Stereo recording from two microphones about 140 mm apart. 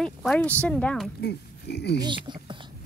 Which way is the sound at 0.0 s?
5° left (ahead or behind).